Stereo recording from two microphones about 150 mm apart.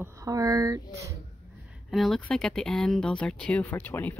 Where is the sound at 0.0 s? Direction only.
20° right (ahead or behind).